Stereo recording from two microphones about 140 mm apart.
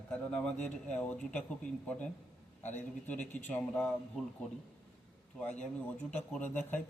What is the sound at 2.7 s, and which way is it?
A man's voice, 10° left (ahead or behind).